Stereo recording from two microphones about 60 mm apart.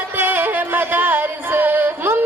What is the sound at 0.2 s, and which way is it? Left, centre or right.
Music, right.